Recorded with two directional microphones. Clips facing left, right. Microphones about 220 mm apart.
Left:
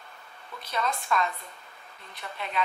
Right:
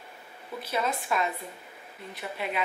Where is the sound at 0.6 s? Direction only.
5° right (ahead or behind).